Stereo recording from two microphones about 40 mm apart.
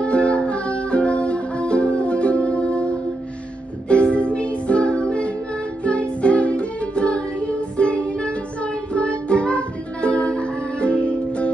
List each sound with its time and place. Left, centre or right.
0.0 s music: left
3.9 s music: left